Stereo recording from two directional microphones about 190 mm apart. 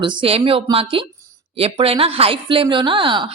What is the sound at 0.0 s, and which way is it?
Speech, 25° right (ahead or behind).